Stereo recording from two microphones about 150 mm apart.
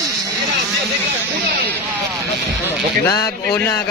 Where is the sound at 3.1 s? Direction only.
25° left (ahead or behind).